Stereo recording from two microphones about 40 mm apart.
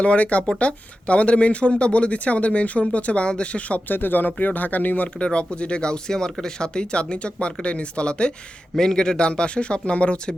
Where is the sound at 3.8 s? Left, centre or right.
Left.